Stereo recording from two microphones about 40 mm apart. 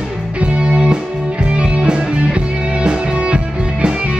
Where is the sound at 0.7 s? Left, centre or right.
Right.